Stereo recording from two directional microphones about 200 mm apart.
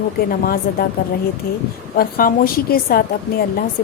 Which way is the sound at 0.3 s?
45° left (ahead or behind).